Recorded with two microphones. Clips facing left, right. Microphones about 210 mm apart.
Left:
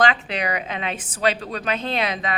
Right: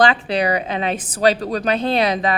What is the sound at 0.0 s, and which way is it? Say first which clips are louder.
A woman's voice: right 5 dB; 35° right (ahead or behind).